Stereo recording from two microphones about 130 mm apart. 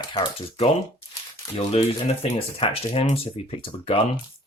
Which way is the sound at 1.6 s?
50° left (ahead or behind).